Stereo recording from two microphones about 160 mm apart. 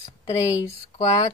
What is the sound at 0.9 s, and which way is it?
Speech, 25° left (ahead or behind).